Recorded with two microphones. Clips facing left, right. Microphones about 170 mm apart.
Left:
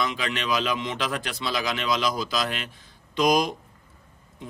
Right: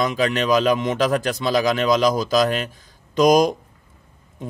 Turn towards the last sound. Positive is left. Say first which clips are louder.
# right 7 dB
turn(degrees=-45)  # may be behind; listen again after turning